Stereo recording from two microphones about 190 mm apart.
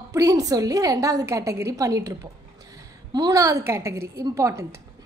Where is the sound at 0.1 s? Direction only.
15° right (ahead or behind).